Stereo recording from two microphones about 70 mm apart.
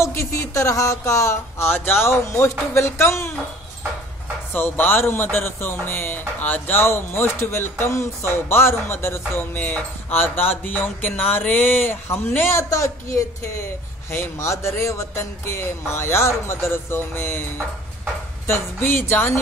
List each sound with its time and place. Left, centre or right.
0.0 s speech: left
4.6 s speech: left
12.6 s speech: left
14.1 s speech: left
14.5 s speech: left
18.5 s speech: left